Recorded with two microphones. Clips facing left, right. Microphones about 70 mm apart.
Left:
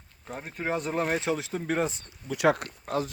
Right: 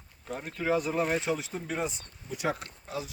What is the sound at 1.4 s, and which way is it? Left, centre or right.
Speech, left.